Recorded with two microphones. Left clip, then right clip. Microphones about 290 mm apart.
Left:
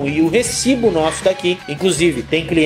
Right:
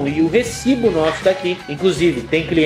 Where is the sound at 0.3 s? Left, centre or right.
Left.